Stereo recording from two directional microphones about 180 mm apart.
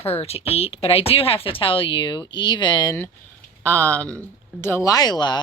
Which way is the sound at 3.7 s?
15° right (ahead or behind).